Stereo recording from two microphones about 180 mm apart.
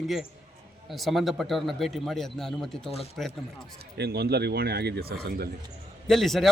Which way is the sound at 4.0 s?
65° right (ahead or behind).